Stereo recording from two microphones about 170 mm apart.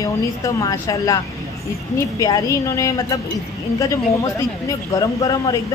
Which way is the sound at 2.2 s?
20° left (ahead or behind).